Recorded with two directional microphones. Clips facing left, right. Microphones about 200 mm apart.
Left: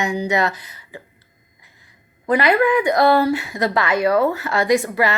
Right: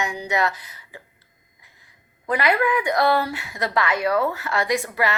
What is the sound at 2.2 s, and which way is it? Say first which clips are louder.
Speech: left 5 dB; 30° left (ahead or behind).